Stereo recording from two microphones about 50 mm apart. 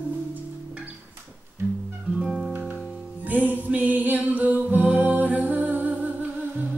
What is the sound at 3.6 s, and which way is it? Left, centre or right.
Music, right.